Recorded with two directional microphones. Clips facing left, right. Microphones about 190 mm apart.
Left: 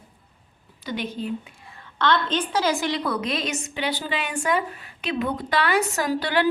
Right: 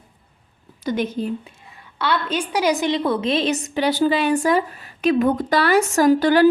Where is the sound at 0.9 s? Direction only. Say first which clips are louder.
Right 7 dB; 45° right (ahead or behind).